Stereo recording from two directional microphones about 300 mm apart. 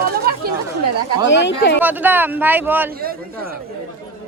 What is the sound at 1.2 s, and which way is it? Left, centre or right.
Speech, left.